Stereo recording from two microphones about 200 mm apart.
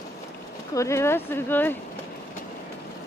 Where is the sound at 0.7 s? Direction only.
15° left (ahead or behind).